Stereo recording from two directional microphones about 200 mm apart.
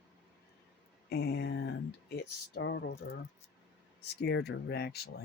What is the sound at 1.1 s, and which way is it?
Speech, 50° left (ahead or behind).